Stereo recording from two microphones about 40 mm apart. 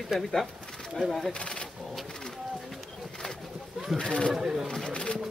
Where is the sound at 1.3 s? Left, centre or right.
Left.